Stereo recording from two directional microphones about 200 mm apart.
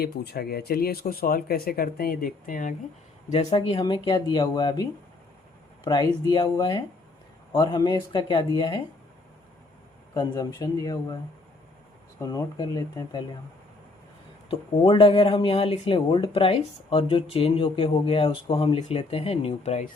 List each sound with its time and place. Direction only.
0.0 s speech: 55° left (ahead or behind)
3.2 s speech: 30° left (ahead or behind)
10.2 s speech: 20° left (ahead or behind)
12.2 s speech: 15° left (ahead or behind)
14.8 s speech: 30° left (ahead or behind)